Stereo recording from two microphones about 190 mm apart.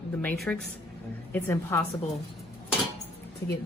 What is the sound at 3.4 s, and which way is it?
Speech, 15° left (ahead or behind).